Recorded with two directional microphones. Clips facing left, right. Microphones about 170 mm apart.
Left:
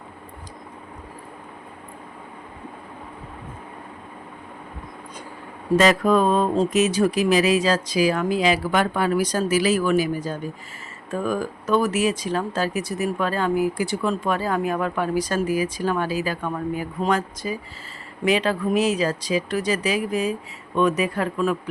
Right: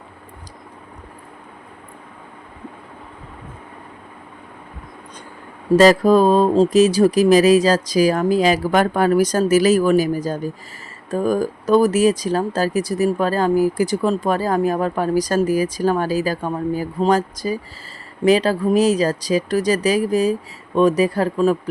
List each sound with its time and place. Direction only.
5.7 s speech: 35° right (ahead or behind)